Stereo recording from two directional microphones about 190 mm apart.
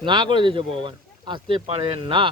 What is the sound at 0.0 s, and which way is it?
Speech, 25° right (ahead or behind).